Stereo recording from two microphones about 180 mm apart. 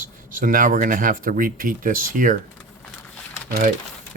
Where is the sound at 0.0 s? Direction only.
50° right (ahead or behind).